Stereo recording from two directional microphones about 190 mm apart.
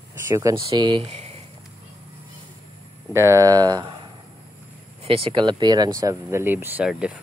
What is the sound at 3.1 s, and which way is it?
Speech, 15° right (ahead or behind).